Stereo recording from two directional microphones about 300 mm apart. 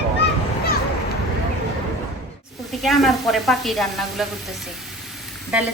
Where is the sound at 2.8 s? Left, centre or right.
Centre.